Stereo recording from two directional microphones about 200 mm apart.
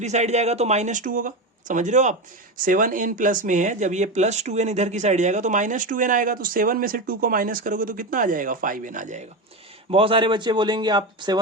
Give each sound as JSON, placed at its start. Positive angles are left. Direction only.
{"t": 0.0, "sound": "speech", "side_deg": -35}
{"t": 9.9, "sound": "speech", "side_deg": -25}